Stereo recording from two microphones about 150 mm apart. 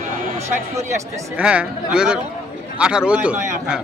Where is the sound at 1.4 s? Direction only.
5° right (ahead or behind).